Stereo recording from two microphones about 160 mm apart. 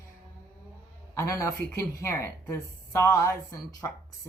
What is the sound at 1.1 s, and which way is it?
Speech, 20° left (ahead or behind).